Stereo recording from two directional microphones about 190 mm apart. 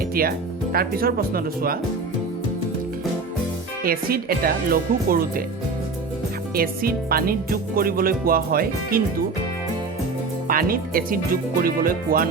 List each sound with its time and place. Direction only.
0.1 s music: 50° right (ahead or behind)
3.8 s music: 50° right (ahead or behind)
6.5 s music: 50° right (ahead or behind)
10.5 s music: 50° right (ahead or behind)